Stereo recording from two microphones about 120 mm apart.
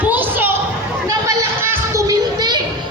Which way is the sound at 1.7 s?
25° right (ahead or behind).